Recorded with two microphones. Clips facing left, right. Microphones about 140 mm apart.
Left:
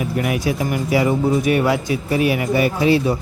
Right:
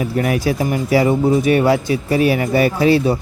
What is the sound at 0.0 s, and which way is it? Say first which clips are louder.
Speech: right 3 dB; 35° right (ahead or behind).